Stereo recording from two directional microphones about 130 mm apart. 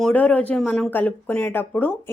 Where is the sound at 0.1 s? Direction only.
10° left (ahead or behind).